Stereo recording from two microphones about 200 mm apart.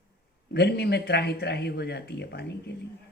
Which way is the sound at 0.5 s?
55° left (ahead or behind).